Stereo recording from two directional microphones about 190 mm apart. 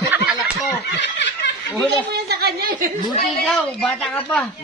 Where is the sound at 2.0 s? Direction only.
60° right (ahead or behind).